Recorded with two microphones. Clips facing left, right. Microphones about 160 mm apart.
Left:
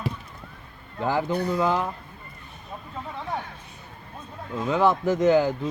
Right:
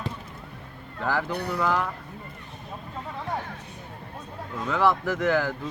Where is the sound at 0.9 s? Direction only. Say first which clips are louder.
Left 3 dB; 20° left (ahead or behind).